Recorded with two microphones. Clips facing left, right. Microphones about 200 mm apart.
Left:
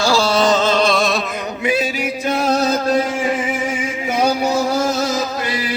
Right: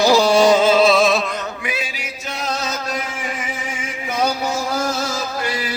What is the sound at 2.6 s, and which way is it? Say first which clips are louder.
Music: left 9 dB; 35° left (ahead or behind).